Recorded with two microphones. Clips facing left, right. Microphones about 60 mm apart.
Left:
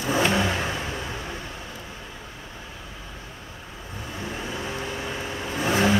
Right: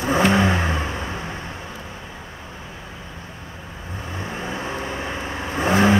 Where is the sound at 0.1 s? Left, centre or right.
Right.